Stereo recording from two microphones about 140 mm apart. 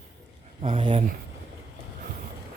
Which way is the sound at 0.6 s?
40° right (ahead or behind).